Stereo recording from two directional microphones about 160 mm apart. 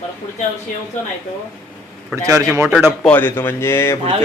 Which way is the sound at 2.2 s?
20° right (ahead or behind).